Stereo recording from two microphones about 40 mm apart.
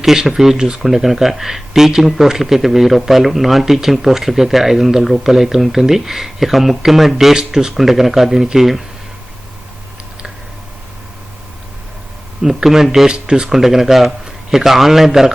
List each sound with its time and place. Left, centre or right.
0.0 s speech: centre
12.4 s speech: centre
13.1 s speech: right
13.5 s speech: centre